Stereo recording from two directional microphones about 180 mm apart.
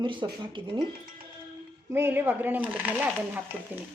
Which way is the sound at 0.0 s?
25° right (ahead or behind).